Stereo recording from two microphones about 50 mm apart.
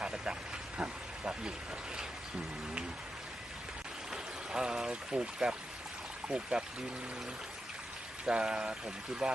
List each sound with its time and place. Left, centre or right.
0.8 s a sound: right
4.1 s pour: centre
6.2 s speech: right
8.2 s speech: centre